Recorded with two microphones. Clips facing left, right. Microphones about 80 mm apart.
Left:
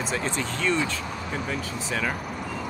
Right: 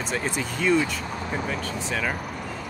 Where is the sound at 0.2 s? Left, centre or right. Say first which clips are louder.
Right 1 dB; centre.